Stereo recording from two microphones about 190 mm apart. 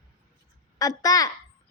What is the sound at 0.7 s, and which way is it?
Speech, 20° left (ahead or behind).